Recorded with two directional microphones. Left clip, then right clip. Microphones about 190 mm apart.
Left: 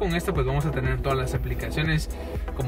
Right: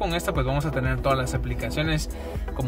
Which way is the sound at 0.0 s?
65° right (ahead or behind).